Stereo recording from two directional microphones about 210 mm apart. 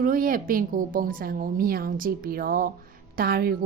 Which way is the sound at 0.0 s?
40° right (ahead or behind).